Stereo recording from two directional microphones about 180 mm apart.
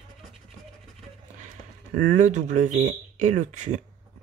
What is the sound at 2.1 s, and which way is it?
Speech, 40° right (ahead or behind).